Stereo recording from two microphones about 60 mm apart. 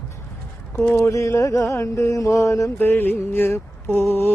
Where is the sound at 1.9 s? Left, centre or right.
Left.